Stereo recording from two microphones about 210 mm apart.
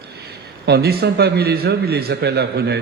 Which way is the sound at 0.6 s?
50° right (ahead or behind).